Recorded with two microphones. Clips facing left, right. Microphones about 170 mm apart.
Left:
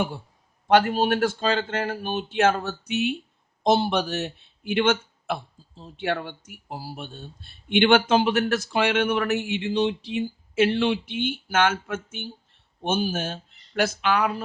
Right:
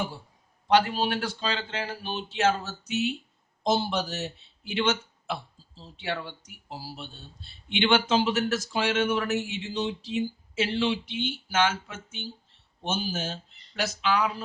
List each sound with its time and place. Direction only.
0.7 s speech: 50° left (ahead or behind)